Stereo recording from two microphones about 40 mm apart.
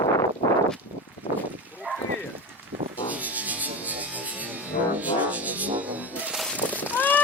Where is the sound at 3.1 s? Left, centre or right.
Right.